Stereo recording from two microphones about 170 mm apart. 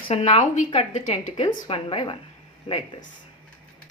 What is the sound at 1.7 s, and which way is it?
A woman's voice, 35° left (ahead or behind).